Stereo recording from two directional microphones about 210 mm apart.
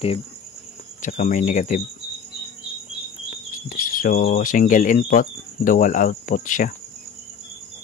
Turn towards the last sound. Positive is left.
turn(degrees=40)  # may be behind; listen again after turning